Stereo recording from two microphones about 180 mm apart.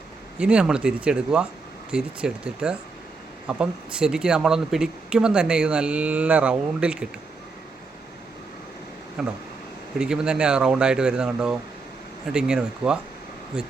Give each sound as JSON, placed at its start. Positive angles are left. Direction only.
{"t": 0.3, "sound": "speech", "side_deg": -5}
{"t": 9.2, "sound": "speech", "side_deg": -5}